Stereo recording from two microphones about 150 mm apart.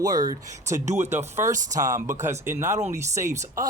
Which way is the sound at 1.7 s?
25° right (ahead or behind).